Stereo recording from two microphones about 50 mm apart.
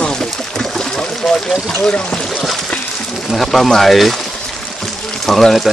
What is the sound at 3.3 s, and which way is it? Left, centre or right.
Speech, centre.